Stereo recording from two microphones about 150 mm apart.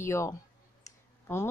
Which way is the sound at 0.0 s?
20° left (ahead or behind).